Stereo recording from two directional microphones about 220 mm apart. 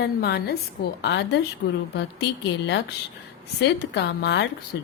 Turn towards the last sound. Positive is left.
turn(degrees=50)  # may be behind; listen again after turning